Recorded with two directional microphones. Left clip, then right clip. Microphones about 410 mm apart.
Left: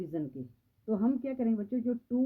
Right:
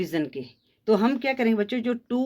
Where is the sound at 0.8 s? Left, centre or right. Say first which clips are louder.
Right 10 dB; centre.